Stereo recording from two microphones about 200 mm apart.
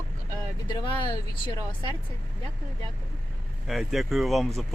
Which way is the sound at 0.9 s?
25° left (ahead or behind).